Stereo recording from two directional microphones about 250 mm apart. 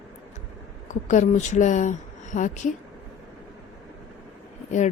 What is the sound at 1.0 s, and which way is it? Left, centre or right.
Speech, left.